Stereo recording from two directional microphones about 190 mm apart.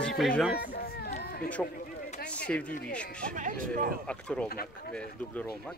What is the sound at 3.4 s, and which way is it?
Speech, 45° right (ahead or behind).